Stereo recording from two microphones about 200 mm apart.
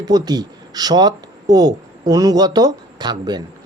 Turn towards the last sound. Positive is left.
turn(degrees=-20)  # may be behind; listen again after turning